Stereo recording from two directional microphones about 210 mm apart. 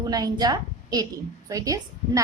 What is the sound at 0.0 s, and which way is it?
A woman's voice, 20° right (ahead or behind).